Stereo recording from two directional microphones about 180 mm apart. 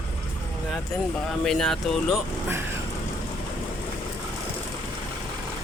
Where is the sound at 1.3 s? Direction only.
Centre (ahead or behind).